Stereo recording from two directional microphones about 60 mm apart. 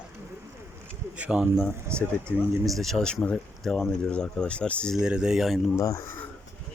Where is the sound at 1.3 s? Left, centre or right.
Centre.